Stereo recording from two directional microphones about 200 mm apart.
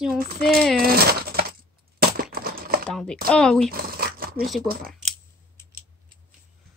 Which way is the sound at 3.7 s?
45° right (ahead or behind).